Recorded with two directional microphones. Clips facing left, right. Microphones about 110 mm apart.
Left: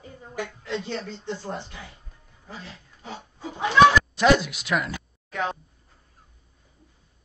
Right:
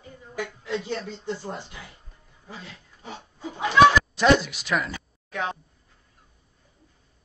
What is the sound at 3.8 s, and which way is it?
Speech, centre (ahead or behind).